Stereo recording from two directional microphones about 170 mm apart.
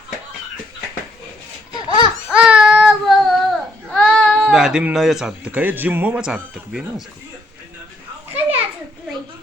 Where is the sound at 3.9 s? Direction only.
5° left (ahead or behind).